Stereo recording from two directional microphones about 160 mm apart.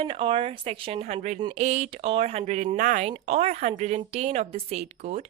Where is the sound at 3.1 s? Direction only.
40° right (ahead or behind).